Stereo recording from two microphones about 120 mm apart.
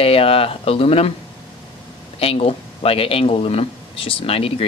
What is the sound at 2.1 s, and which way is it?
Speech, 55° left (ahead or behind).